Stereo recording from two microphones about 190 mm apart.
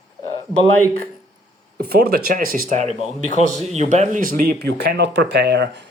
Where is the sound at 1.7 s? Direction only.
55° right (ahead or behind).